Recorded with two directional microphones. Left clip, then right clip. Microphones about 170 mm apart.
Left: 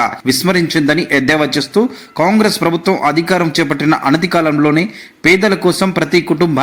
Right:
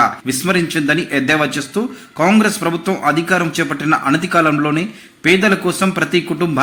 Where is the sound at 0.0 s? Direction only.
25° left (ahead or behind).